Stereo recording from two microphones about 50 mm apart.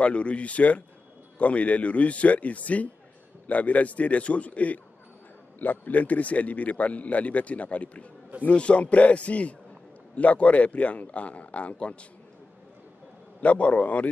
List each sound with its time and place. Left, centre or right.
0.0 s speech: left
13.4 s speech: left